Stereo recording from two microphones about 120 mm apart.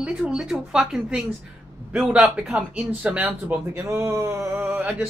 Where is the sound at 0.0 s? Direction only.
5° right (ahead or behind).